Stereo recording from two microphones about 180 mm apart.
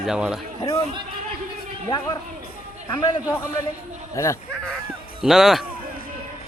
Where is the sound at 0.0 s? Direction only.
5° right (ahead or behind).